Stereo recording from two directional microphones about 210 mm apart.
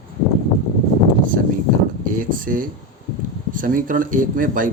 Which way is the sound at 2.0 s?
40° right (ahead or behind).